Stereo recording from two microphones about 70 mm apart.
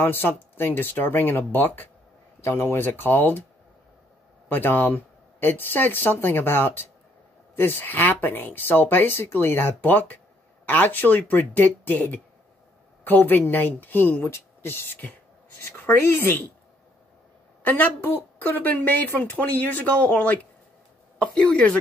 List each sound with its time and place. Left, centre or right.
0.0 s a woman's voice: left
4.5 s a woman's voice: left
17.6 s a woman's voice: left